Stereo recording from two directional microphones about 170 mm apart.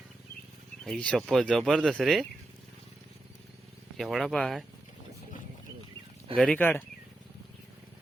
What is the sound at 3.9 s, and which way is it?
Speech, centre (ahead or behind).